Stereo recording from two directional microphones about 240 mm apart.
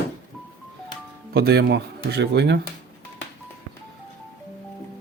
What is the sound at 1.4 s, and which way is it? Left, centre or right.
Speech, right.